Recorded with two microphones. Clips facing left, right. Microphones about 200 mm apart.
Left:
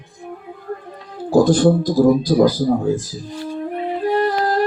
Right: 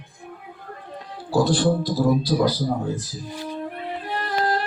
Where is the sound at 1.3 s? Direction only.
45° left (ahead or behind).